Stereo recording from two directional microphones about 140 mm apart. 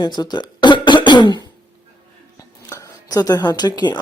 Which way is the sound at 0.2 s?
30° left (ahead or behind).